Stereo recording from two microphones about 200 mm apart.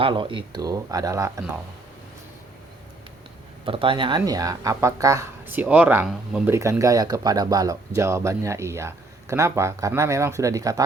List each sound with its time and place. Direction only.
0.0 s speech: 25° right (ahead or behind)
3.7 s speech: 25° right (ahead or behind)